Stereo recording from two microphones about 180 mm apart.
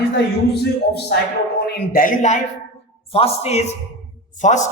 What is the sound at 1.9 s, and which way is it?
A man's voice, 50° left (ahead or behind).